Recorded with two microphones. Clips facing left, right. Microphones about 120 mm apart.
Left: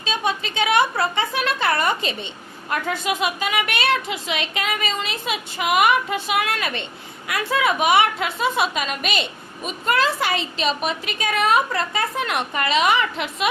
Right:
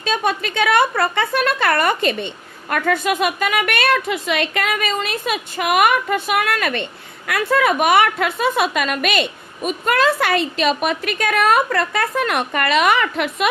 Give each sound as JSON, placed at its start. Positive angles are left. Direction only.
{"t": 0.0, "sound": "speech", "side_deg": -55}